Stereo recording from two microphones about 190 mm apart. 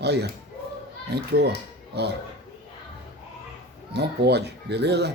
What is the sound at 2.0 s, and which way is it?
Speech, 60° right (ahead or behind).